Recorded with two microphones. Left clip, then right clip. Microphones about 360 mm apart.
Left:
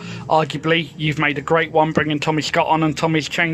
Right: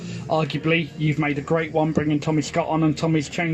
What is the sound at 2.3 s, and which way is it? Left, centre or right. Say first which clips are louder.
Speech: left 6 dB; left.